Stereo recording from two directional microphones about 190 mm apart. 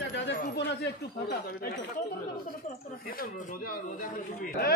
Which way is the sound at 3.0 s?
50° left (ahead or behind).